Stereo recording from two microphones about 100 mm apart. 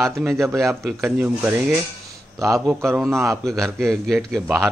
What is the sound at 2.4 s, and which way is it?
Speech, 30° right (ahead or behind).